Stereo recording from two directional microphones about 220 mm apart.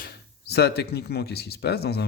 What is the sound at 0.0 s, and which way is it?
Speech, 45° left (ahead or behind).